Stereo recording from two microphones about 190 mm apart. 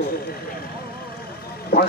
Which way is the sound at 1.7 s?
55° left (ahead or behind).